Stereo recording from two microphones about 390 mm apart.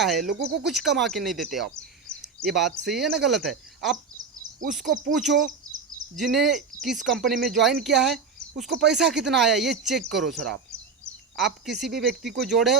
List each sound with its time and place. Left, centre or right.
0.0 s speech: centre
0.3 s speech: right
0.6 s speech: centre
6.1 s speech: centre
8.0 s a sound: centre
8.8 s speech: centre